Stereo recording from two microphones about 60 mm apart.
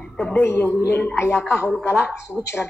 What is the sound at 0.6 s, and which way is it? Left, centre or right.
Speech, left.